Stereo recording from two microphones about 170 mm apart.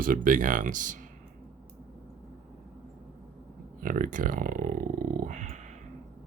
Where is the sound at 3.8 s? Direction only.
50° right (ahead or behind).